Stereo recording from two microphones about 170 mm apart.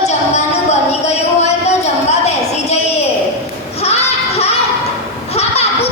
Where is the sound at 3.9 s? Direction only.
35° left (ahead or behind).